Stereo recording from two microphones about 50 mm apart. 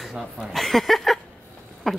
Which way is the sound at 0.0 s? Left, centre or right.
Centre.